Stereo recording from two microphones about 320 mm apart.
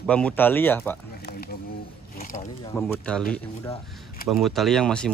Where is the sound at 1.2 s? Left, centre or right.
Left.